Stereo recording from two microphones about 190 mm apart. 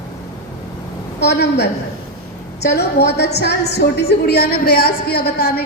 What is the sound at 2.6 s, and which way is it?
A woman's voice, 60° left (ahead or behind).